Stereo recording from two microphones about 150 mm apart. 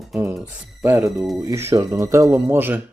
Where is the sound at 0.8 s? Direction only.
15° right (ahead or behind).